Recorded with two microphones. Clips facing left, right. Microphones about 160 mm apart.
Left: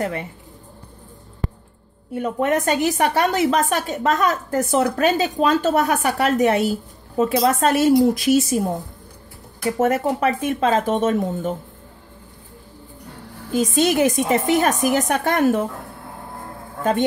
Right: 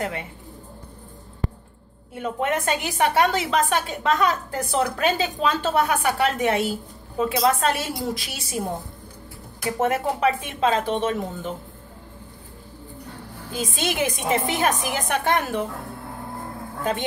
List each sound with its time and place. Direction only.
0.0 s speech: 40° left (ahead or behind)
2.1 s a woman's voice: 40° left (ahead or behind)
9.8 s a woman's voice: 45° left (ahead or behind)
13.5 s a woman's voice: 45° left (ahead or behind)